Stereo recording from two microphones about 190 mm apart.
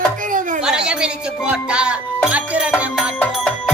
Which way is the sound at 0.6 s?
5° right (ahead or behind).